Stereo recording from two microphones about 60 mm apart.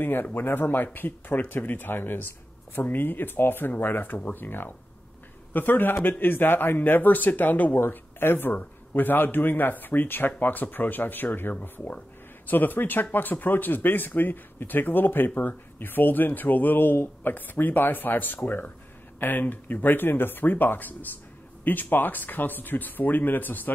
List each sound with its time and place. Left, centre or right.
0.0 s speech: left